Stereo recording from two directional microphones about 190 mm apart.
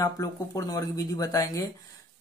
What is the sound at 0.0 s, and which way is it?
Speech, 15° left (ahead or behind).